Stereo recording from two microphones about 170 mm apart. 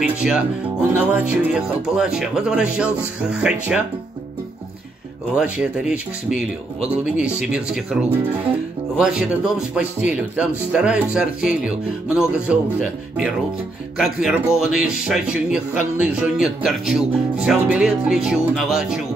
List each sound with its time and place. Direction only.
0.0 s speech: 5° right (ahead or behind)
5.3 s speech: 5° right (ahead or behind)
7.1 s speech: 5° right (ahead or behind)